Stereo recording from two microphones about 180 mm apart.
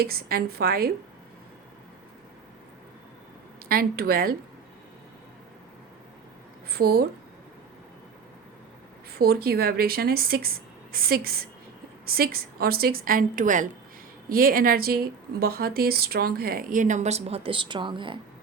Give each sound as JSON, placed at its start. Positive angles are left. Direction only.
{"t": 0.0, "sound": "speech", "side_deg": -55}
{"t": 3.7, "sound": "speech", "side_deg": -55}
{"t": 6.7, "sound": "speech", "side_deg": -60}
{"t": 9.1, "sound": "a woman's voice", "side_deg": -60}